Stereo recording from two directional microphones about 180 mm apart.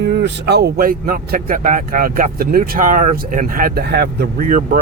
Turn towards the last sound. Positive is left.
turn(degrees=-65)  # may be behind; listen again after turning